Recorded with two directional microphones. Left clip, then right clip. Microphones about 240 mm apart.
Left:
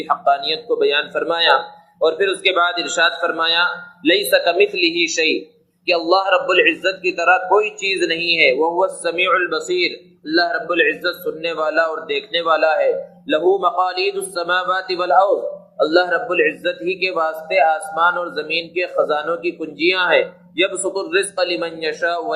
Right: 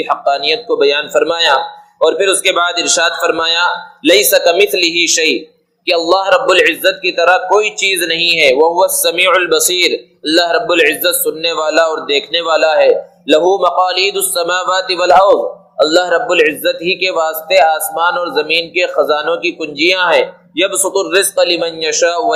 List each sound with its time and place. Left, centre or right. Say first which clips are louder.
0.0 s a man's voice: right 4 dB; right